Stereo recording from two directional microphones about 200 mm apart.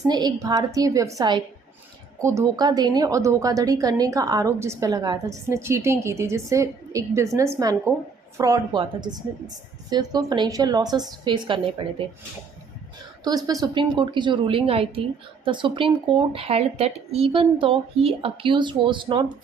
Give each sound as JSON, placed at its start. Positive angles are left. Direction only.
{"t": 0.1, "sound": "a woman's voice", "side_deg": -20}
{"t": 13.2, "sound": "speech", "side_deg": -20}